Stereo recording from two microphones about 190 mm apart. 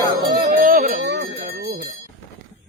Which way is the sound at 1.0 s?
60° right (ahead or behind).